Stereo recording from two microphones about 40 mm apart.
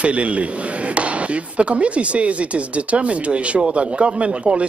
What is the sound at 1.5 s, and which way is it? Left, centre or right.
A man's voice, right.